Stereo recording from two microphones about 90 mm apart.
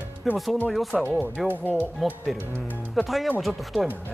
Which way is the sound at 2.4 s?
25° right (ahead or behind).